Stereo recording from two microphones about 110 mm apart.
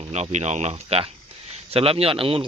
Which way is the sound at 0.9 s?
65° right (ahead or behind).